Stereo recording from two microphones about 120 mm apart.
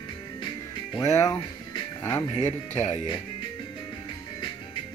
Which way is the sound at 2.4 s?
70° left (ahead or behind).